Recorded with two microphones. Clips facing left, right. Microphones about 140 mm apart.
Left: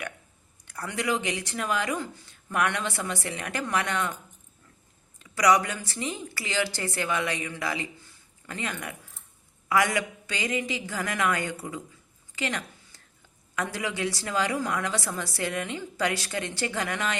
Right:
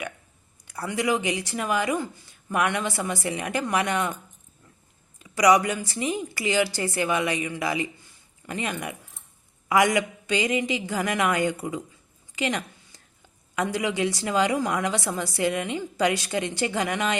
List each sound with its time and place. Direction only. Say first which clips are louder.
0.7 s a woman's voice: right 4 dB; 10° right (ahead or behind)
5.2 s a woman's voice: right 3 dB; 10° right (ahead or behind)
12.4 s a sound: right 4 dB; 15° right (ahead or behind)
13.6 s a woman's voice: right 5 dB; 15° right (ahead or behind)